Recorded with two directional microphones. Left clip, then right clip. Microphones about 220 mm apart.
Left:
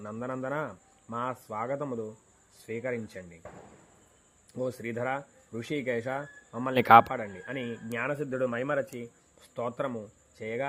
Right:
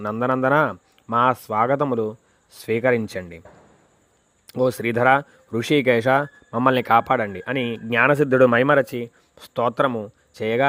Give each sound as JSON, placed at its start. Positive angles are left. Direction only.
{"t": 0.0, "sound": "a man's voice", "side_deg": -40}
{"t": 4.4, "sound": "speech", "side_deg": -40}
{"t": 6.7, "sound": "a man's voice", "side_deg": 0}
{"t": 7.1, "sound": "a man's voice", "side_deg": -40}